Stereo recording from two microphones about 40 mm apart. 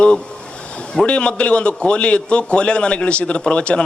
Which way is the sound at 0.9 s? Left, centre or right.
Left.